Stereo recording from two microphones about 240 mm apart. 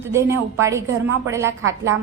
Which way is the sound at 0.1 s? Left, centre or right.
Centre.